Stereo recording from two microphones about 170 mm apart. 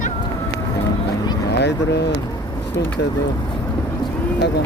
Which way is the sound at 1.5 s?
75° left (ahead or behind).